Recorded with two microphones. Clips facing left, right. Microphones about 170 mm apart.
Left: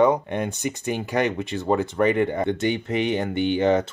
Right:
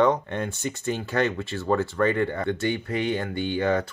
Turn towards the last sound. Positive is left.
turn(degrees=20)  # may be behind; listen again after turning